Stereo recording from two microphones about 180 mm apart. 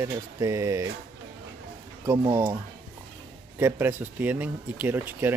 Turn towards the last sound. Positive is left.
turn(degrees=-10)  # may be behind; listen again after turning